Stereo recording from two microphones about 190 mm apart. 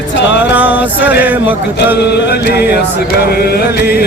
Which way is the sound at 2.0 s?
60° left (ahead or behind).